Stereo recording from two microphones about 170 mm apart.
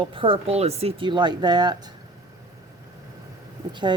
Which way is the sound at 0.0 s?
30° right (ahead or behind).